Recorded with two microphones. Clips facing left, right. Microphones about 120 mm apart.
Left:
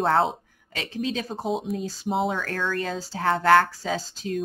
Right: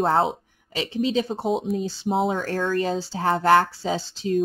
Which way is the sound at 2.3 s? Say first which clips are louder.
Right 4 dB; 35° right (ahead or behind).